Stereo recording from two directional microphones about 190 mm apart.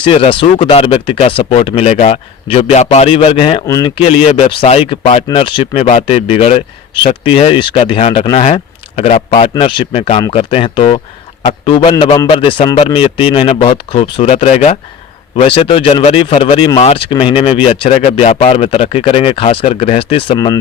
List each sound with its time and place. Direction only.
0.0 s speech: 30° left (ahead or behind)